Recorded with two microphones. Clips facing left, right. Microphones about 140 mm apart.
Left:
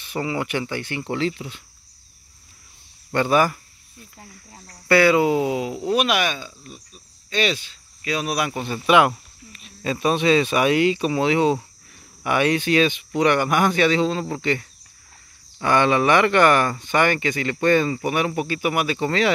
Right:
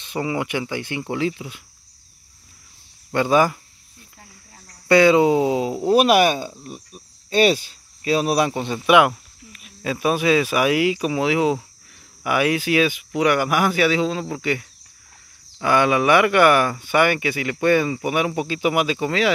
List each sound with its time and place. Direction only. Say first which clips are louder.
0.0 s speech: right 1 dB; 15° right (ahead or behind)
3.1 s speech: right 1 dB; 15° right (ahead or behind)
4.8 s speech: right 2 dB; 20° right (ahead or behind)